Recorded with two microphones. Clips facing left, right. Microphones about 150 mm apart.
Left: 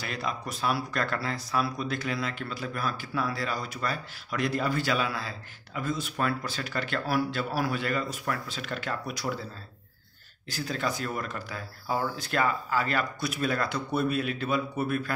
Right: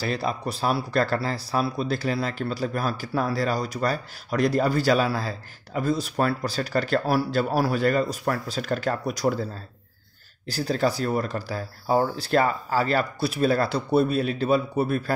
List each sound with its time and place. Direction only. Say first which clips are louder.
0.0 s speech: right 7 dB; 35° right (ahead or behind)
10.5 s speech: right 7 dB; 35° right (ahead or behind)